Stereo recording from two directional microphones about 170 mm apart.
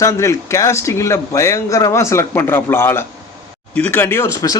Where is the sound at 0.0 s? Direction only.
20° left (ahead or behind).